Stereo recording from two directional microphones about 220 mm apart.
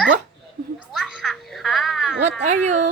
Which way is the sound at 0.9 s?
Centre (ahead or behind).